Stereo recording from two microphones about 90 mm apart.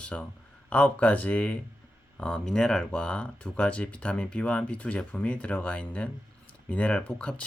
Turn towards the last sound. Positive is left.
turn(degrees=10)  # may be behind; listen again after turning